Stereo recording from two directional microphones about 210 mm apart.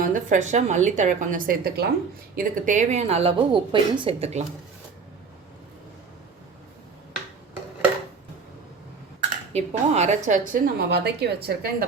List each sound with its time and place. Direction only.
0.0 s a woman's voice: 40° right (ahead or behind)
9.5 s a woman's voice: 30° right (ahead or behind); by 11.9 s 45° right (ahead or behind)